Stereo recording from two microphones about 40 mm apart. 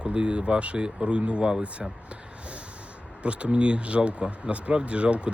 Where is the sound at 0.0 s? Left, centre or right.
Right.